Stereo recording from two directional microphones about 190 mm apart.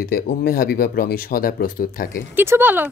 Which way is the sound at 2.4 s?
10° right (ahead or behind).